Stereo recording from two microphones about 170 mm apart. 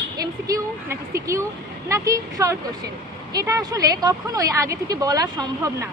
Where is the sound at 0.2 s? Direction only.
20° right (ahead or behind).